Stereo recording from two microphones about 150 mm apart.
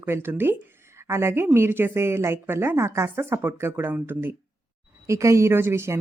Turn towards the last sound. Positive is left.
turn(degrees=-15)  # may be behind; listen again after turning